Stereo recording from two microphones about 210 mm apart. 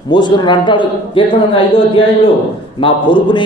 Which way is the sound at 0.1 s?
20° left (ahead or behind).